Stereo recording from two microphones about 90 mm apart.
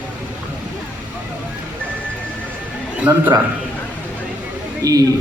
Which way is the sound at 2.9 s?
20° right (ahead or behind).